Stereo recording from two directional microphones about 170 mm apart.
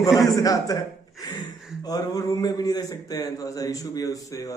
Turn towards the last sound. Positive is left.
turn(degrees=20)  # may be behind; listen again after turning